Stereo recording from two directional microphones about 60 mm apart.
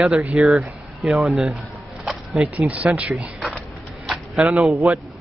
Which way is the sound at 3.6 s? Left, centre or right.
Centre.